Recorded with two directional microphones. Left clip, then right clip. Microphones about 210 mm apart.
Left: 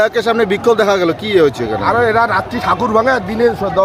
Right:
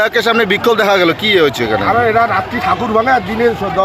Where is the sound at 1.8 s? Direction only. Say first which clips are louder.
Left 1 dB; 20° left (ahead or behind).